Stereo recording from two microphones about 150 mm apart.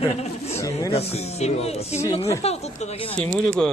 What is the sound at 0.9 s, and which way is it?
Speech, 45° left (ahead or behind).